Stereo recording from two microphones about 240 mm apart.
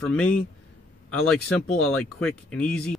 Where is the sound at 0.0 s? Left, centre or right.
Centre.